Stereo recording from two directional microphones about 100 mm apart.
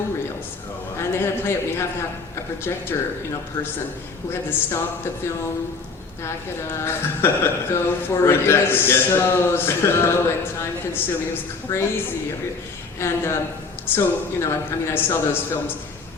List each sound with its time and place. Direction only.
0.9 s a man's voice: 25° left (ahead or behind)
4.3 s a man's voice: 25° left (ahead or behind)
6.2 s a man's voice: 25° left (ahead or behind)
13.0 s a man's voice: 25° left (ahead or behind)